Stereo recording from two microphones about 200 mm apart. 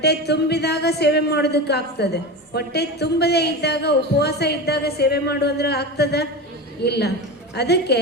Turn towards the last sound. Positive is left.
turn(degrees=55)  # may be behind; listen again after turning